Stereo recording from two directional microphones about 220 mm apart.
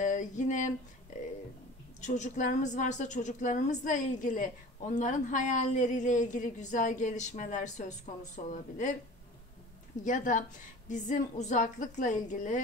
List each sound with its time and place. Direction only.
0.0 s a sound: 35° left (ahead or behind)
2.0 s a woman's voice: 35° left (ahead or behind)
10.0 s a woman's voice: 35° left (ahead or behind)